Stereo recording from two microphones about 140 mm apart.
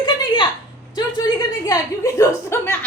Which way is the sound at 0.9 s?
30° left (ahead or behind).